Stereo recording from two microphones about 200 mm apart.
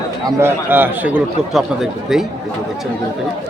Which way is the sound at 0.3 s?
15° right (ahead or behind).